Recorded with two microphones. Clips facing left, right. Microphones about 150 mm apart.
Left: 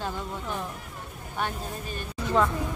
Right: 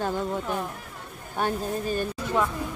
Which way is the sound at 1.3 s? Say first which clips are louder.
Right 5 dB; 40° right (ahead or behind).